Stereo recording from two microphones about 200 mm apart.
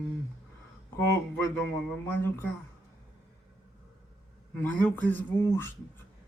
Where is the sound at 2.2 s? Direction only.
10° left (ahead or behind).